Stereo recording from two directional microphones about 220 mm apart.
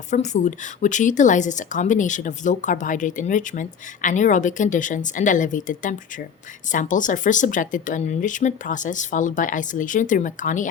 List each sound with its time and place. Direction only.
0.1 s speech: 35° left (ahead or behind)